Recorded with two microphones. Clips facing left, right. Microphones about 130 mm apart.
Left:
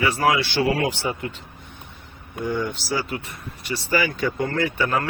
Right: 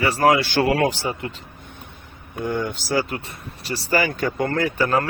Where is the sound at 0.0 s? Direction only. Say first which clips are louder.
Right 3 dB; 35° right (ahead or behind).